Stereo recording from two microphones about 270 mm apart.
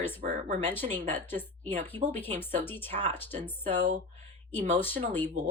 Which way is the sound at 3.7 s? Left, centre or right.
Right.